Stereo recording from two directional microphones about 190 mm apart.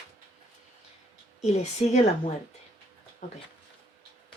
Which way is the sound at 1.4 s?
35° left (ahead or behind).